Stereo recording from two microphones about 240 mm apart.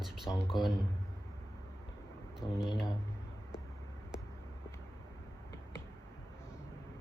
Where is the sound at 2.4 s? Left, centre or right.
Centre.